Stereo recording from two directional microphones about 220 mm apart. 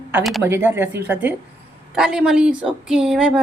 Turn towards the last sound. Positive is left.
turn(degrees=-5)  # may be behind; listen again after turning